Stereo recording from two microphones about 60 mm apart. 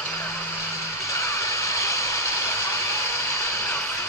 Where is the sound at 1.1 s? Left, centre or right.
Left.